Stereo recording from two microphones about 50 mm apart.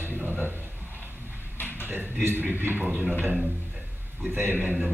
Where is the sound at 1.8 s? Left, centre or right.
Right.